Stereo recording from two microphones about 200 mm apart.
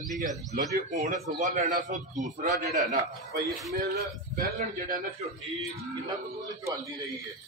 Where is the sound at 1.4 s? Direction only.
45° right (ahead or behind).